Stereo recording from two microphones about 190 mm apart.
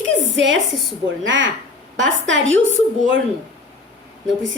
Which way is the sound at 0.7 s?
Centre (ahead or behind).